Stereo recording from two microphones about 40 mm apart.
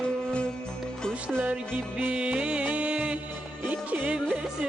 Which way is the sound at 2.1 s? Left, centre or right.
Right.